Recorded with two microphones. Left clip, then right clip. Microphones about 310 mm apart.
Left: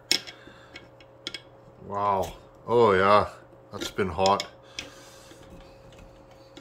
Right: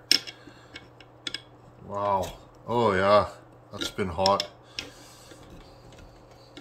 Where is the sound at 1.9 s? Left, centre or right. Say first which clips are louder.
Left 1 dB; centre.